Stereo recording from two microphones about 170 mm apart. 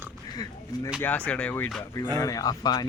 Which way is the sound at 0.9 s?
10° left (ahead or behind).